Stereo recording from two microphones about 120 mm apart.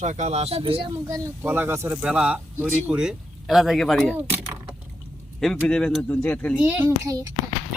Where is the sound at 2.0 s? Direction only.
10° right (ahead or behind).